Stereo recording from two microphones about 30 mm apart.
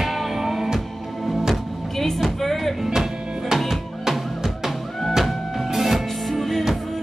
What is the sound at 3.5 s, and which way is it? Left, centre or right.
Drum, centre.